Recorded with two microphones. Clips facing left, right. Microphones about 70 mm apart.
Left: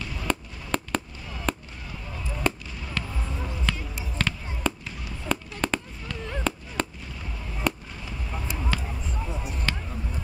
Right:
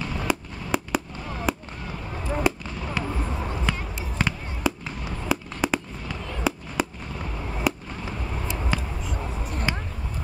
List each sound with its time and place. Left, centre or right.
0.3 s fireworks: centre
3.0 s basketball bounce: centre
3.7 s a sound: centre
4.2 s fireworks: centre
8.7 s basketball bounce: centre
9.4 s a sound: right